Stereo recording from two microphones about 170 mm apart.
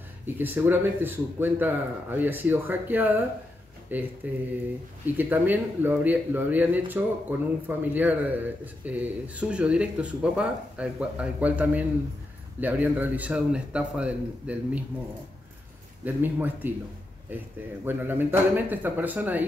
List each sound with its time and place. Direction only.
0.4 s speech: 10° right (ahead or behind)
16.0 s speech: 10° right (ahead or behind)
17.8 s speech: 10° right (ahead or behind)